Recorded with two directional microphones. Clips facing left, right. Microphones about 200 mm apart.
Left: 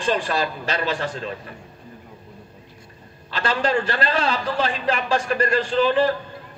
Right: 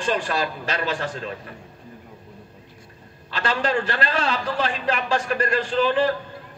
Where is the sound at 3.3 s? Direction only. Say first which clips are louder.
Left 2 dB; 35° left (ahead or behind).